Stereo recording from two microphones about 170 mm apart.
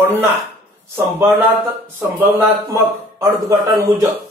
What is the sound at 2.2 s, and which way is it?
Speech, 15° right (ahead or behind).